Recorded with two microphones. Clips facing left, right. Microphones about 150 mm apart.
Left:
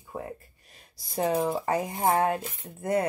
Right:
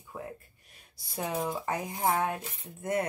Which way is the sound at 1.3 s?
30° left (ahead or behind).